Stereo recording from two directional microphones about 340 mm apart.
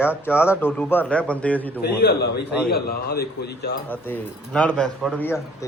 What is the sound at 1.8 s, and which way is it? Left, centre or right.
Speech, left.